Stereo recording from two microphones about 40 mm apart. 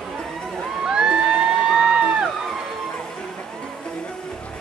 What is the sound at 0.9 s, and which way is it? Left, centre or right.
Crowd, right.